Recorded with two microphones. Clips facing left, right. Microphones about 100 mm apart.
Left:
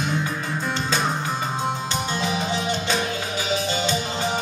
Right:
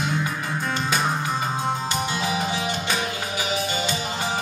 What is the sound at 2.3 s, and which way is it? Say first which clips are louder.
Music: left 1 dB; 15° right (ahead or behind).